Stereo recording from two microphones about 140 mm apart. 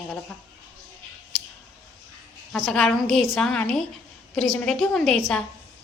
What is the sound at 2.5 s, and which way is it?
A woman's voice, 5° left (ahead or behind).